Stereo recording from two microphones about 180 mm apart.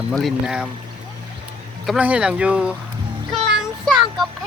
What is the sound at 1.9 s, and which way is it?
Speech, 5° right (ahead or behind).